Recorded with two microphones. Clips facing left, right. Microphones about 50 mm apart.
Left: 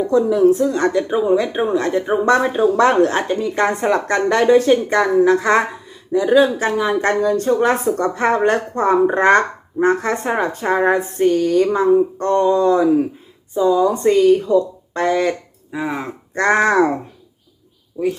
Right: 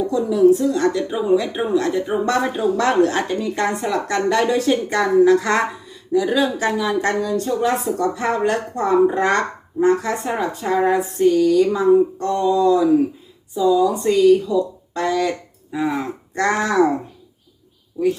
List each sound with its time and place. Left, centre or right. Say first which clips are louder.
0.1 s a woman's voice: left 1 dB; left
15.7 s speech: right 1 dB; centre
16.3 s a woman's voice: left 4 dB; left